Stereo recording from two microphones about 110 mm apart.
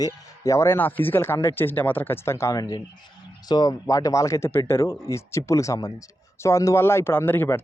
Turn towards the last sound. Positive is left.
turn(degrees=20)  # may be behind; listen again after turning